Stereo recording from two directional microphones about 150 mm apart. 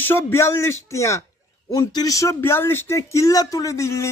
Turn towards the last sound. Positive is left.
turn(degrees=20)  # may be behind; listen again after turning